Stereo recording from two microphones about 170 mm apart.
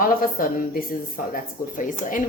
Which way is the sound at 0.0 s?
55° left (ahead or behind).